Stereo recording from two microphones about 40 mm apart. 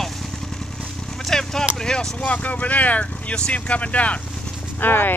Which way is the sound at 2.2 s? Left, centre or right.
Left.